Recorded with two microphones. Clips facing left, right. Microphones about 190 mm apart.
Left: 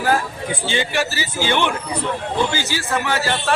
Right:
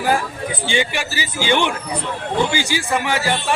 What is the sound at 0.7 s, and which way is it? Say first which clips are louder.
A man's voice: even; 15° right (ahead or behind).